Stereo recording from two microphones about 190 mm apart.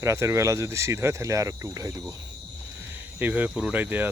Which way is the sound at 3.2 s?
10° right (ahead or behind).